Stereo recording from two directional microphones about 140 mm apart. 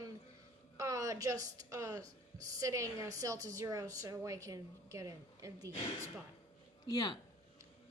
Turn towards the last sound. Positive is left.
turn(degrees=30)  # may be behind; listen again after turning